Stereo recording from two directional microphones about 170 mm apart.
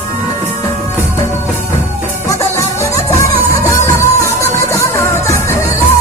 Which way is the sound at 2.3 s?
15° left (ahead or behind).